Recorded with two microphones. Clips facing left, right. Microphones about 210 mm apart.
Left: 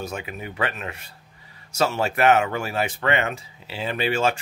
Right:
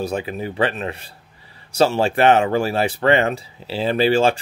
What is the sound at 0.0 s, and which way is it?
Speech, 35° right (ahead or behind).